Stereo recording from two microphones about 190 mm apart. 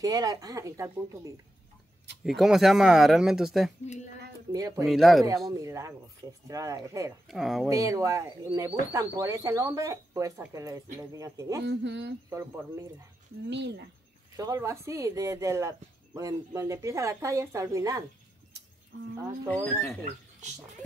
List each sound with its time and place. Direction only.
0.0 s speech: 20° right (ahead or behind)
2.2 s speech: centre (ahead or behind)
4.5 s speech: 20° right (ahead or behind)
4.8 s speech: centre (ahead or behind)
5.5 s speech: 15° right (ahead or behind)
7.2 s speech: centre (ahead or behind)
7.7 s speech: 15° right (ahead or behind)
11.6 s speech: 65° right (ahead or behind)
12.3 s speech: 15° right (ahead or behind)
13.5 s speech: 65° right (ahead or behind)
14.3 s speech: 20° right (ahead or behind)
19.5 s speech: 5° left (ahead or behind)